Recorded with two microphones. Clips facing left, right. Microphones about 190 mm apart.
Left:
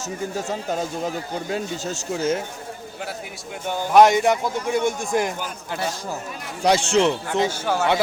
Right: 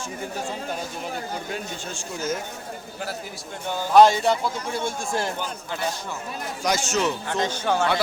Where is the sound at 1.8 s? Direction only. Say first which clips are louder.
Left 6 dB; 40° left (ahead or behind).